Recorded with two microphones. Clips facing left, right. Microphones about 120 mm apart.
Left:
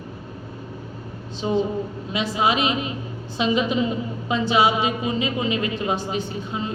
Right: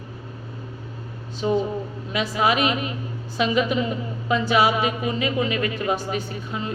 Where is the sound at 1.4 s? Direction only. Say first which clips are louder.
Even; 30° left (ahead or behind).